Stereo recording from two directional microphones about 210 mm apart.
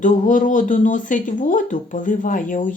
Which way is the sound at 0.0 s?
40° left (ahead or behind).